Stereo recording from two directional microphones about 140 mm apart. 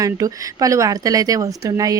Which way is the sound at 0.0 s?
25° right (ahead or behind).